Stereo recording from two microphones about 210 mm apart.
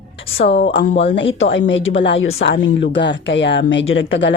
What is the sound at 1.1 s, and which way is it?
A woman's voice, 65° left (ahead or behind).